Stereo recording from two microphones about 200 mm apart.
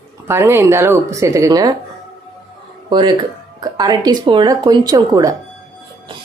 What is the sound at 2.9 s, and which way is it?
A woman's voice, 20° right (ahead or behind).